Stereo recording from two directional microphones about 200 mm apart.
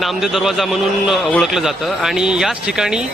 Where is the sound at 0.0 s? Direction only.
Centre (ahead or behind).